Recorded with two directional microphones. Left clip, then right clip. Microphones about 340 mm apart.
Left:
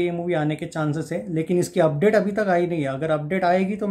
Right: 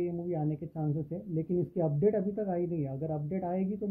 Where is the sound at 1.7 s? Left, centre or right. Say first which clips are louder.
Left 11 dB; centre.